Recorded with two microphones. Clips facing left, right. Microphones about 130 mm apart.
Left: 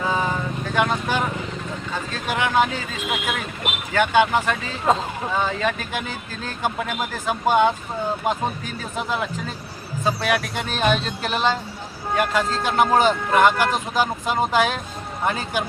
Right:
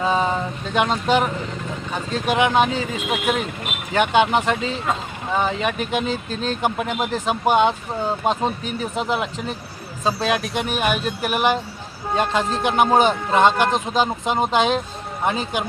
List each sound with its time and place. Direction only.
0.0 s vehicle: 20° right (ahead or behind)
1.9 s speech: 20° right (ahead or behind)